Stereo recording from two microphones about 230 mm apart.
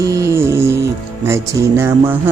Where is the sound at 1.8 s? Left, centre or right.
Centre.